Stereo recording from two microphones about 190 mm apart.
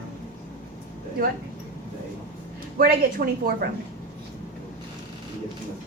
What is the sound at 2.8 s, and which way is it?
Speech, 50° right (ahead or behind).